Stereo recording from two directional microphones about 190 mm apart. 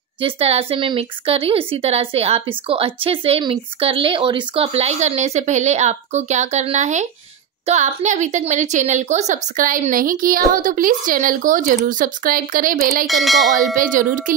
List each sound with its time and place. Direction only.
0.2 s a woman's voice: 30° right (ahead or behind); by 13.0 s 50° right (ahead or behind)
13.0 s a sound: centre (ahead or behind)
13.7 s a woman's voice: 45° right (ahead or behind)